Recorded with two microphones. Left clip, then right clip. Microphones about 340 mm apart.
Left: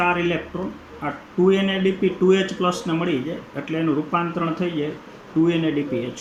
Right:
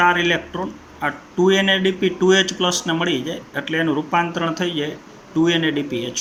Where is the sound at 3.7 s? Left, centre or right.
Right.